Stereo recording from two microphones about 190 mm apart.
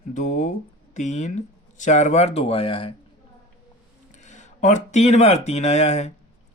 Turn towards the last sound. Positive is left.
turn(degrees=35)  # may be behind; listen again after turning